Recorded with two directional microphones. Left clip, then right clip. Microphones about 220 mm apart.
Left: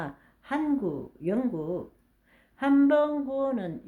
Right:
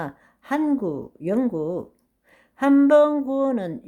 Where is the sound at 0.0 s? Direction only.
45° right (ahead or behind).